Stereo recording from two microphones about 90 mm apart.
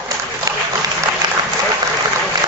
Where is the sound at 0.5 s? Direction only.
40° right (ahead or behind).